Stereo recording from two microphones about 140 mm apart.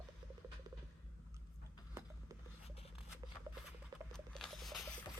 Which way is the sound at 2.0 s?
20° right (ahead or behind).